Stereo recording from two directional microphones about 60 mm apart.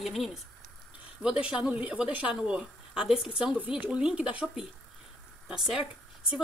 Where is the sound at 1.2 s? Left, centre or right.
Centre.